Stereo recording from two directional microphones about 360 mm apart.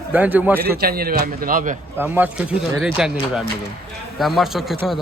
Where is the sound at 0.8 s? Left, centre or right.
Right.